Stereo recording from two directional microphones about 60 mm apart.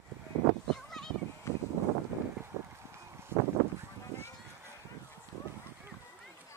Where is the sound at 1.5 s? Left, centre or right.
Left.